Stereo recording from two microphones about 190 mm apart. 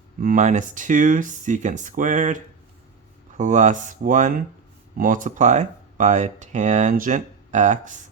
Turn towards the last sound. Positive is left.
turn(degrees=-40)  # may be behind; listen again after turning